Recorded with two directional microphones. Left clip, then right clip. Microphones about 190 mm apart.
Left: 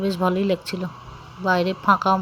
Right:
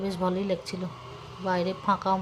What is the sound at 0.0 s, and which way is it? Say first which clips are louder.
Speech: left 7 dB; 20° left (ahead or behind).